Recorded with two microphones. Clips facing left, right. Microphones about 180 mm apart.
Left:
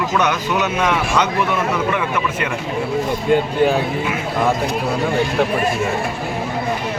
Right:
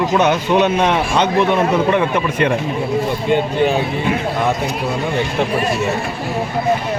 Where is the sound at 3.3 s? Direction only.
Centre (ahead or behind).